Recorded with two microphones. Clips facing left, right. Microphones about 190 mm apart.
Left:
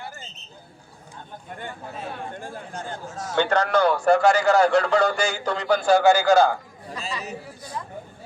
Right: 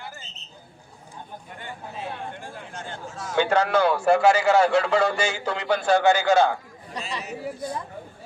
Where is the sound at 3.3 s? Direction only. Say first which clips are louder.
Even; 10° right (ahead or behind).